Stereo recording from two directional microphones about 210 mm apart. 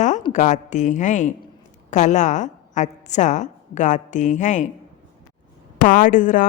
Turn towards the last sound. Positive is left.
turn(degrees=40)  # may be behind; listen again after turning